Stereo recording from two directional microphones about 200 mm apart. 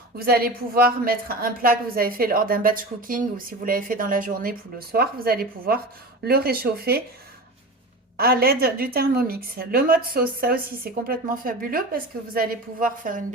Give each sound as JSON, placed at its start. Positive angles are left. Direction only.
{"t": 0.2, "sound": "a woman's voice", "side_deg": -50}
{"t": 8.1, "sound": "a woman's voice", "side_deg": -50}